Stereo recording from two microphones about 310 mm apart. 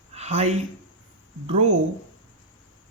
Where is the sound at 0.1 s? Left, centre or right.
Centre.